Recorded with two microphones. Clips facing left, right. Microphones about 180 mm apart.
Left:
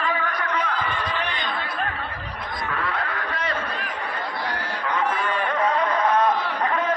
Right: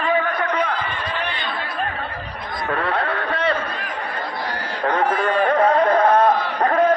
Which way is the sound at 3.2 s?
30° right (ahead or behind).